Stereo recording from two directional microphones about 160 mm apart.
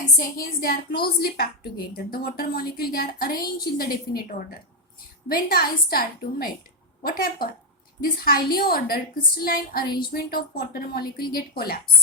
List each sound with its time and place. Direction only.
0.0 s a woman's voice: 60° left (ahead or behind)
5.3 s a woman's voice: 70° left (ahead or behind)